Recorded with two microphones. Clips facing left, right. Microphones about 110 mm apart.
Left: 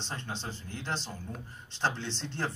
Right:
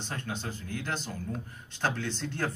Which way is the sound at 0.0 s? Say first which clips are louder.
Right 2 dB; 25° left (ahead or behind).